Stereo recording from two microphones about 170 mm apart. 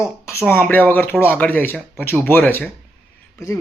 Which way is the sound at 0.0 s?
15° left (ahead or behind).